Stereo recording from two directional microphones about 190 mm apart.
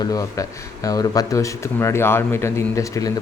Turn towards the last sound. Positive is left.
turn(degrees=15)  # may be behind; listen again after turning